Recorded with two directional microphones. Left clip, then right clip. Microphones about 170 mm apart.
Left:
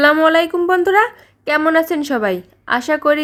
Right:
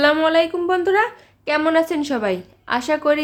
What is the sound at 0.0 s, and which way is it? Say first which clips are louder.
A woman's voice: left 4 dB; 30° left (ahead or behind).